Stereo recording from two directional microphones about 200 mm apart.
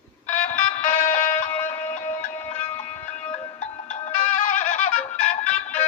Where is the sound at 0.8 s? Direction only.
40° left (ahead or behind).